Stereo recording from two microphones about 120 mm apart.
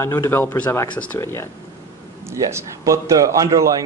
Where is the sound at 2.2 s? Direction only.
25° right (ahead or behind).